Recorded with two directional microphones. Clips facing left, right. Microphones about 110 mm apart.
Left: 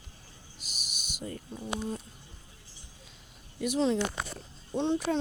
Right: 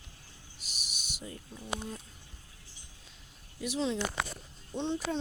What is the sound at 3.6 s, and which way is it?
Speech, 50° left (ahead or behind).